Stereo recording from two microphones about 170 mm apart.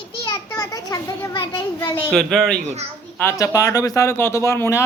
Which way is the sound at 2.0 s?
Centre (ahead or behind).